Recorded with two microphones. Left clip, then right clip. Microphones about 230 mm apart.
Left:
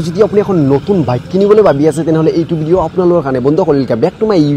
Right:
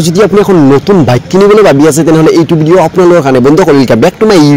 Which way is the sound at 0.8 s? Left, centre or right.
Right.